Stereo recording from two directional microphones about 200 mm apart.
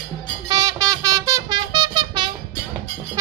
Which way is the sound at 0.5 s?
20° right (ahead or behind).